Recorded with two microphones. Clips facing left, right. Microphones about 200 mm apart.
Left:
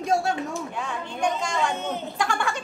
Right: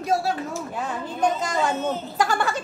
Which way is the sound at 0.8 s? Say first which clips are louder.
Right 4 dB; 40° right (ahead or behind).